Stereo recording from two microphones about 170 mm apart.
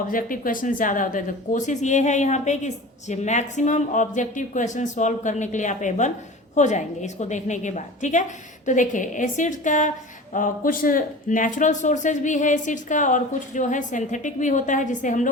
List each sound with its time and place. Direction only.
0.1 s speech: 55° left (ahead or behind)